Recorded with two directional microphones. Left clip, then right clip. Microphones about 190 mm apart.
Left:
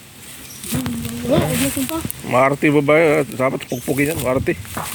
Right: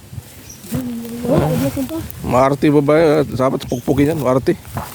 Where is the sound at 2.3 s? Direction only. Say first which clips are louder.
Right 2 dB; 30° right (ahead or behind).